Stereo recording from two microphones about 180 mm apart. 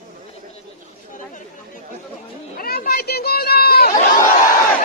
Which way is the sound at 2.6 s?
55° left (ahead or behind).